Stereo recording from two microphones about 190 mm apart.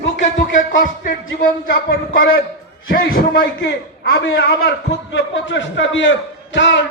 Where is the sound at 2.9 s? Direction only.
50° left (ahead or behind).